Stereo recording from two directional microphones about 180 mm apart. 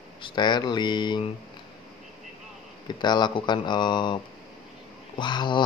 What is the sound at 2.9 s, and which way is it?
Speech, 25° left (ahead or behind).